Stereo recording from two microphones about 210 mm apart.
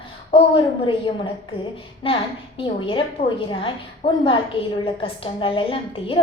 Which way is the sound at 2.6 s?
25° left (ahead or behind).